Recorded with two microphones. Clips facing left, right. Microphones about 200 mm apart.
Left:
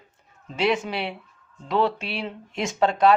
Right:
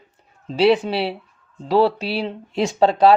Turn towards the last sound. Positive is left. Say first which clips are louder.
# right 5 dB
turn(degrees=-35)  # may be behind; listen again after turning